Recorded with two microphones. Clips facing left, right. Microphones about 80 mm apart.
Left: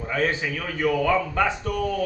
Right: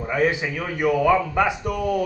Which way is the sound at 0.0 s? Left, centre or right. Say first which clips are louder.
Right 3 dB; centre.